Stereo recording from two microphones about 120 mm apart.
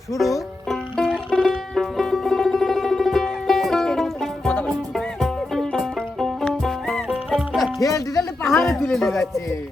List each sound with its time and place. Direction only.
0.2 s music: centre (ahead or behind)
7.8 s music: 30° left (ahead or behind)
8.4 s a sound: centre (ahead or behind)